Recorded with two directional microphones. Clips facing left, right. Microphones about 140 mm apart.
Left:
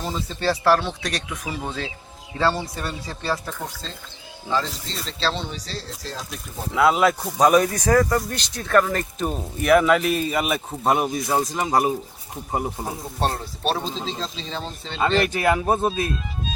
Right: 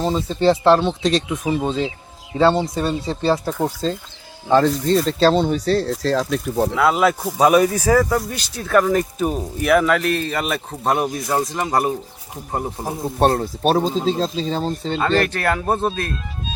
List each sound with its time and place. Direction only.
0.0 s speech: 20° right (ahead or behind)
4.4 s speech: 55° right (ahead or behind); by 6.7 s 75° right (ahead or behind)
6.7 s speech: centre (ahead or behind)
13.1 s speech: 55° right (ahead or behind)
15.2 s speech: 10° left (ahead or behind)